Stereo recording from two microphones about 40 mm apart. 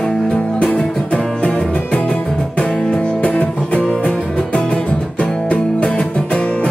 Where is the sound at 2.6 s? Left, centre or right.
Centre.